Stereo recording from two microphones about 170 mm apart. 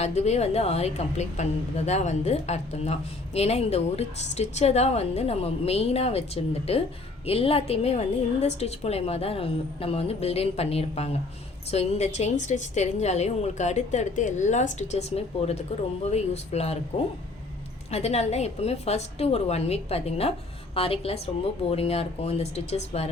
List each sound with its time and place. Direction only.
0.0 s a woman's voice: 40° left (ahead or behind)